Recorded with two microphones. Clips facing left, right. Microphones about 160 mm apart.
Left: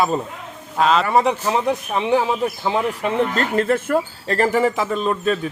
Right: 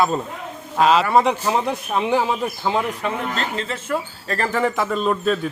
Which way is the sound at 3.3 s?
50° left (ahead or behind).